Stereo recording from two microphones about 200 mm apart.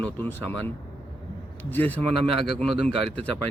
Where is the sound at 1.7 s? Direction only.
10° left (ahead or behind).